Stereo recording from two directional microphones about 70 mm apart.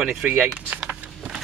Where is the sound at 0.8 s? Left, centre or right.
Centre.